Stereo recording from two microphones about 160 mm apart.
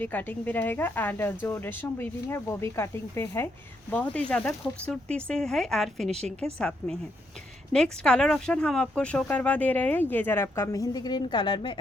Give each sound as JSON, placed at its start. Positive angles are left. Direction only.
{"t": 0.0, "sound": "speech", "side_deg": 10}